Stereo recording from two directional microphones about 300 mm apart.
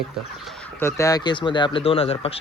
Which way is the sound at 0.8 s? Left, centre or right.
Centre.